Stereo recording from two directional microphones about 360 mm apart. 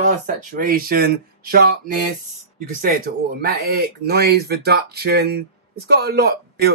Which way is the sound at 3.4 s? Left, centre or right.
Right.